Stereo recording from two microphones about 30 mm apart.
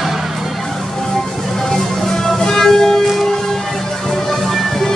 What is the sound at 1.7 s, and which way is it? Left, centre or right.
Music, centre.